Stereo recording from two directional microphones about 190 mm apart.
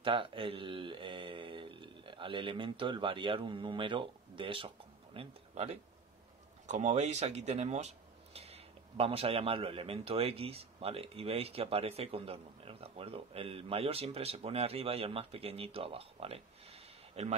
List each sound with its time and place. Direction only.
0.0 s speech: 25° right (ahead or behind)